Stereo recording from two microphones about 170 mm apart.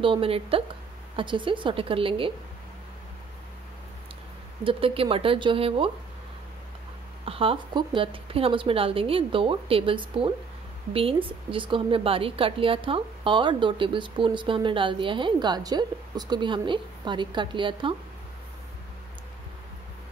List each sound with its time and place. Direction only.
0.0 s a woman's voice: 30° right (ahead or behind)
4.6 s a woman's voice: 30° right (ahead or behind)
7.2 s a woman's voice: 30° right (ahead or behind)